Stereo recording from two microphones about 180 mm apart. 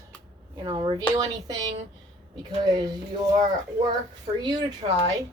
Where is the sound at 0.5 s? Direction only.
25° right (ahead or behind).